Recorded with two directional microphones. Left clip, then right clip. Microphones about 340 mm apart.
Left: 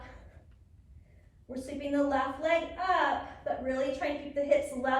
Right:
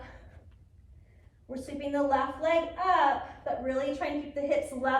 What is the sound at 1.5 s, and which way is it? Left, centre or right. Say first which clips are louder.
A woman's voice: even; centre.